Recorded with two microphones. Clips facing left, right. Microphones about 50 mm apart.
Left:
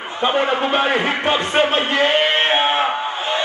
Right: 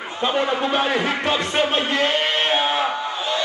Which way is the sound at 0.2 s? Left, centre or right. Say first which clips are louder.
Left 3 dB; left.